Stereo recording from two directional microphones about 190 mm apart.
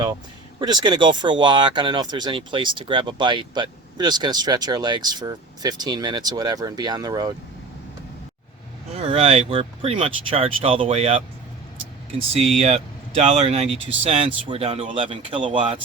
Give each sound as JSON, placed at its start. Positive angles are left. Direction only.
{"t": 0.6, "sound": "speech", "side_deg": -20}
{"t": 9.0, "sound": "speech", "side_deg": -30}
{"t": 12.4, "sound": "speech", "side_deg": -30}